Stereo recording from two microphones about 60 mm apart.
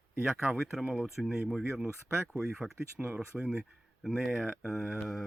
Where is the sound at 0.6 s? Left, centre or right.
Centre.